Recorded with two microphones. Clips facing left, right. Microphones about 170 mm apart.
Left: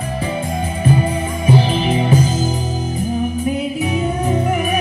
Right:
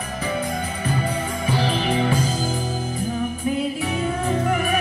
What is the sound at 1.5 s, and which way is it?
Music, 20° left (ahead or behind).